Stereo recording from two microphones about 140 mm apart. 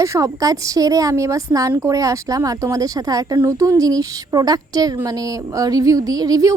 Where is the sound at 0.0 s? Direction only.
20° right (ahead or behind).